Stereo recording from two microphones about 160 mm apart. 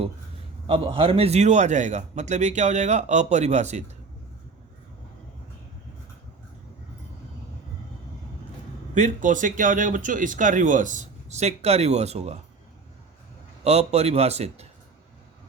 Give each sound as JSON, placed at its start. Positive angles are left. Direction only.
{"t": 0.7, "sound": "speech", "side_deg": -35}
{"t": 9.0, "sound": "speech", "side_deg": -50}
{"t": 13.7, "sound": "a man's voice", "side_deg": -40}